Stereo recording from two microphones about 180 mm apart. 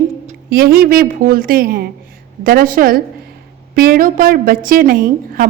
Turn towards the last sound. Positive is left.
turn(degrees=-50)  # may be behind; listen again after turning